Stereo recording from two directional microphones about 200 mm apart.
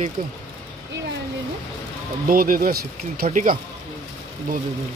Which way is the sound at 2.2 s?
45° right (ahead or behind).